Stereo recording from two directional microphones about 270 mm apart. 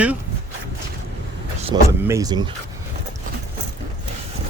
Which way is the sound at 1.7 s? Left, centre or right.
Centre.